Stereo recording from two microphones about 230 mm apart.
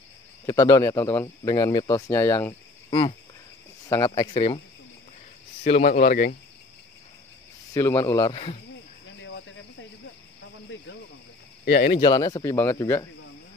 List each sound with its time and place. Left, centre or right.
0.5 s speech: centre
5.6 s speech: left
7.7 s speech: centre
11.6 s speech: left
11.9 s speech: centre